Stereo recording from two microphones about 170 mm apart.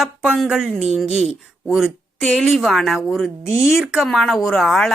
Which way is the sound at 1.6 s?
Centre (ahead or behind).